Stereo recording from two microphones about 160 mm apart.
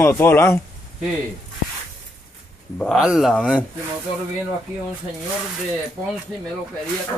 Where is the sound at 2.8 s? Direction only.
Centre (ahead or behind).